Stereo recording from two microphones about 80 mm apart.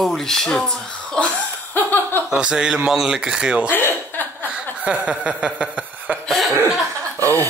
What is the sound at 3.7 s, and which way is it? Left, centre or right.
Chuckle, left.